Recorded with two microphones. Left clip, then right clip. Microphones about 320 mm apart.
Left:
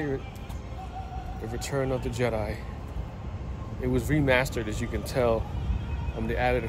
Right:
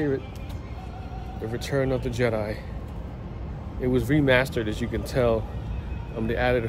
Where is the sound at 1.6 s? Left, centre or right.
Centre.